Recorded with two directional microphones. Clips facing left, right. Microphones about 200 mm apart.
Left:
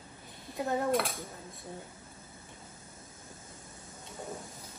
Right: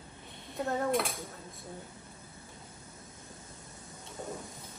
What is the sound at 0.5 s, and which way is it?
Cutlery, centre (ahead or behind).